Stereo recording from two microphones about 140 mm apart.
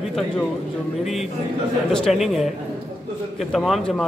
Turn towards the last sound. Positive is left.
turn(degrees=5)  # may be behind; listen again after turning